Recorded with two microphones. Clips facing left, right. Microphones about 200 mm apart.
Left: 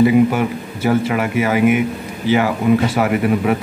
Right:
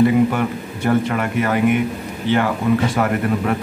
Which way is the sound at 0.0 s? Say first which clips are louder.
Left 2 dB; 5° left (ahead or behind).